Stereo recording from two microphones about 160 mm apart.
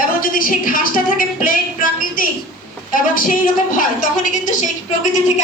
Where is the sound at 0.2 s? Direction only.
60° left (ahead or behind).